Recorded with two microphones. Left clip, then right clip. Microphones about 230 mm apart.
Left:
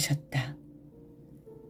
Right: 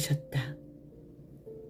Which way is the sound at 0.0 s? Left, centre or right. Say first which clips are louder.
Left 3 dB; left.